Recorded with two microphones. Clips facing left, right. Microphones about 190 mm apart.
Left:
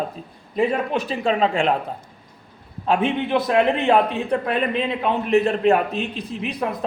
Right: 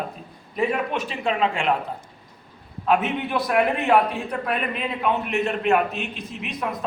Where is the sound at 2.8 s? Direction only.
30° left (ahead or behind).